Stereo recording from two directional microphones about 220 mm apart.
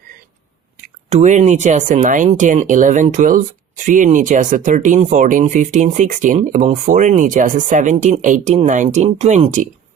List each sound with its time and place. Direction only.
1.1 s speech: 30° right (ahead or behind)